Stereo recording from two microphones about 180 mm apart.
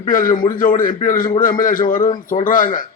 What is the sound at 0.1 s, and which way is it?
A man's voice, 50° left (ahead or behind).